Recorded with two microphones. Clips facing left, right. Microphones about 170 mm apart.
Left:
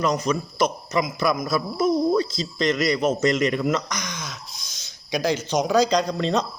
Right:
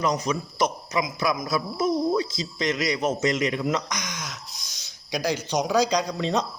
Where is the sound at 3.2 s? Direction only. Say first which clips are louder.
Left 3 dB; 15° right (ahead or behind).